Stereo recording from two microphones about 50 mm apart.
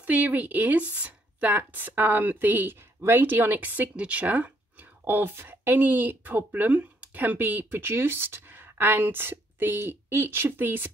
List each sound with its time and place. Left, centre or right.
0.0 s speech: right